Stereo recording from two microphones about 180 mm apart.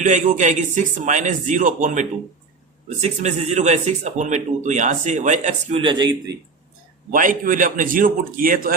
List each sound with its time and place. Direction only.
0.0 s speech: 45° right (ahead or behind)
5.7 s a man's voice: 25° right (ahead or behind)
7.1 s speech: 50° right (ahead or behind)